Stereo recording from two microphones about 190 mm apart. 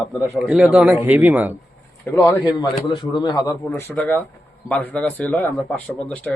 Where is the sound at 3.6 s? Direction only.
10° left (ahead or behind).